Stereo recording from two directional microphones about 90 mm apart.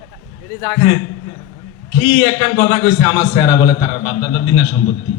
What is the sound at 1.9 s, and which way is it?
A man's voice, 50° left (ahead or behind).